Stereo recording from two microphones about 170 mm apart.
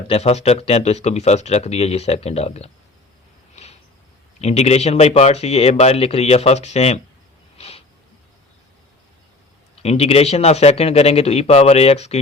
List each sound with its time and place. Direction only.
0.1 s speech: 40° left (ahead or behind)
3.5 s a sound: 40° left (ahead or behind)
4.4 s speech: 40° left (ahead or behind)
9.8 s speech: 40° left (ahead or behind)